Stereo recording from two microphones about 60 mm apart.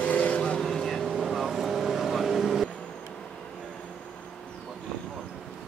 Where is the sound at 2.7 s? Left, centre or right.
Centre.